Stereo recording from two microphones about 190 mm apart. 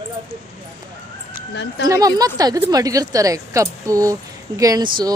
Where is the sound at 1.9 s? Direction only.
20° right (ahead or behind).